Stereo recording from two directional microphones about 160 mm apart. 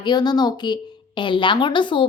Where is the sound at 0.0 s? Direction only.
25° left (ahead or behind).